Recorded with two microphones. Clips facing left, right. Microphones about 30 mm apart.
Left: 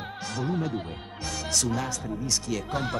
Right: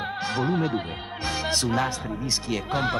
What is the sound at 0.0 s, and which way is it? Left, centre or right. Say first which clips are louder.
Speech: right 6 dB; right.